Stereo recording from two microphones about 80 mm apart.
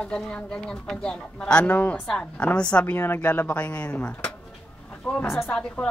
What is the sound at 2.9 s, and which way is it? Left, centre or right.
A woman's voice, left.